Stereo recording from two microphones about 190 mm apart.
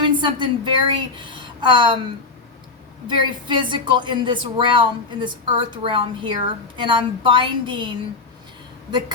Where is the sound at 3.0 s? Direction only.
25° right (ahead or behind).